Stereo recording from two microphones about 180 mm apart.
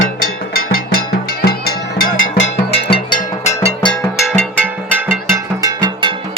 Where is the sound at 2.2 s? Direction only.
90° left.